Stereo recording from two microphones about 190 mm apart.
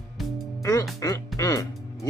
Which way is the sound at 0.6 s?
15° left (ahead or behind).